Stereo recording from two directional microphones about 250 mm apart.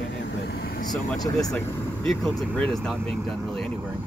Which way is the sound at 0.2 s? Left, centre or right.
Left.